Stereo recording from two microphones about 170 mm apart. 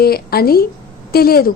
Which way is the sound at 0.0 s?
65° left (ahead or behind).